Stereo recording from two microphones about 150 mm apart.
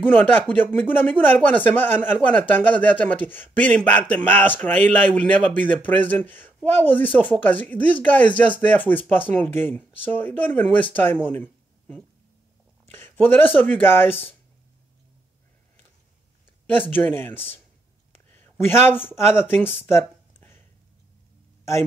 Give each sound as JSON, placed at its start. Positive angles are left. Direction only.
{"t": 0.0, "sound": "speech", "side_deg": 15}
{"t": 11.2, "sound": "a sound", "side_deg": 10}
{"t": 12.9, "sound": "speech", "side_deg": 15}
{"t": 16.9, "sound": "speech", "side_deg": 15}
{"t": 18.1, "sound": "a sound", "side_deg": 15}
{"t": 19.0, "sound": "speech", "side_deg": 15}